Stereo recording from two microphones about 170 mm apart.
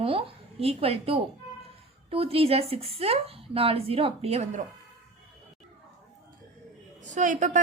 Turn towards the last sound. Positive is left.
turn(degrees=-45)  # may be behind; listen again after turning